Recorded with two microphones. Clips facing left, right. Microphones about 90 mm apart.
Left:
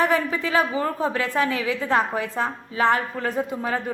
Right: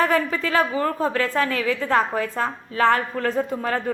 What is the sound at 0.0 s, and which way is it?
A woman's voice, 20° left (ahead or behind).